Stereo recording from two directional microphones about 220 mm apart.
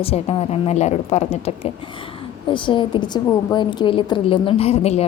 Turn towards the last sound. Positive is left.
turn(degrees=30)  # may be behind; listen again after turning